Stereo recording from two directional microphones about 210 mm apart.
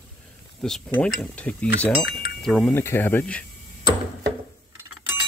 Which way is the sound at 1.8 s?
5° left (ahead or behind).